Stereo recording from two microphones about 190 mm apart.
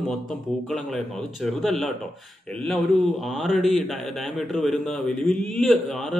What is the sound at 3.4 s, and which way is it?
A man's voice, centre (ahead or behind).